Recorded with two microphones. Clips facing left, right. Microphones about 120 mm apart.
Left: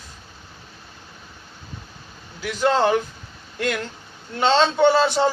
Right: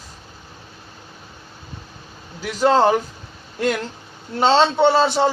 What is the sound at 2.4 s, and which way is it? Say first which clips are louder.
Speech: right 4 dB; 5° right (ahead or behind).